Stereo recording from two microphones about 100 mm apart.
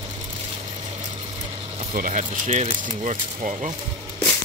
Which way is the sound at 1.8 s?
70° right (ahead or behind).